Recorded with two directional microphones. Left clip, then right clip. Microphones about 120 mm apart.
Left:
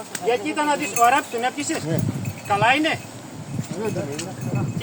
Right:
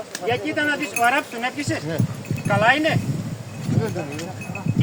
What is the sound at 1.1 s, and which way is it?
Speech, 5° right (ahead or behind).